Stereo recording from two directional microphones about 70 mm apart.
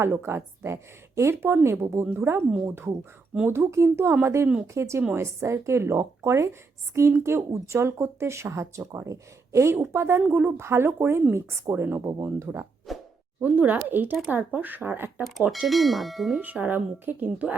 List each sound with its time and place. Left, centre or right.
0.0 s speech: right
12.9 s speech: centre
13.4 s speech: right
15.6 s speech: centre
16.4 s speech: right